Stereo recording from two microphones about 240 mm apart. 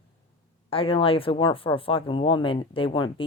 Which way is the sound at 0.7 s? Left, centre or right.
Left.